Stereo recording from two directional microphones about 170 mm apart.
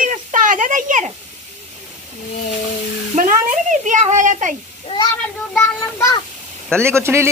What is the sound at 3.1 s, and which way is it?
Speech, 50° right (ahead or behind).